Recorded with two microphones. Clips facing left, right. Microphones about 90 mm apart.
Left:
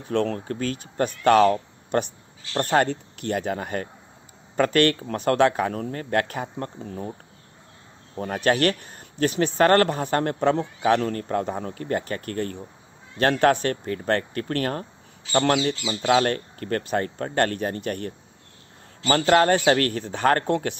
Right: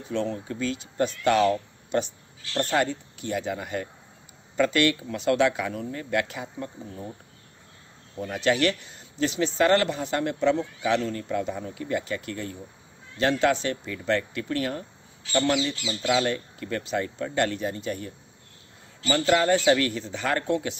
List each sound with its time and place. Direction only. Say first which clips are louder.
0.0 s speech: left 4 dB; 60° left (ahead or behind)
8.2 s speech: left 2 dB; 50° left (ahead or behind)